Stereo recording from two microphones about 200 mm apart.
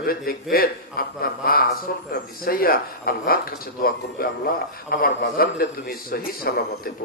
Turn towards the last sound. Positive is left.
turn(degrees=45)  # may be behind; listen again after turning